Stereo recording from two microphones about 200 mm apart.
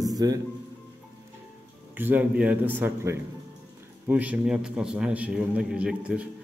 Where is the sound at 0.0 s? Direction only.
20° right (ahead or behind).